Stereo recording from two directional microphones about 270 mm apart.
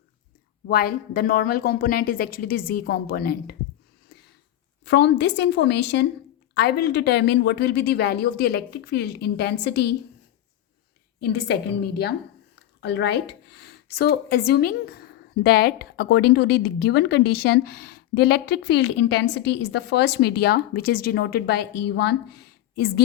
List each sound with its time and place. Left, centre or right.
0.7 s speech: left
4.9 s speech: left
11.2 s speech: left
12.8 s a woman's voice: left